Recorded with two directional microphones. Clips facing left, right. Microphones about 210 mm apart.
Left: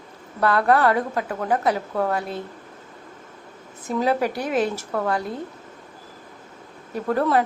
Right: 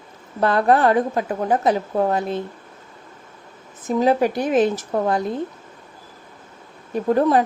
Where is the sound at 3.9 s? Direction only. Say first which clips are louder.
Right 4 dB; 20° right (ahead or behind).